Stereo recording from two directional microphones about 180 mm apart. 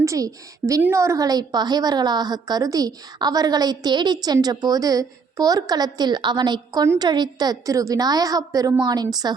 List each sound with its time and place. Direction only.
0.0 s a woman's voice: 20° right (ahead or behind)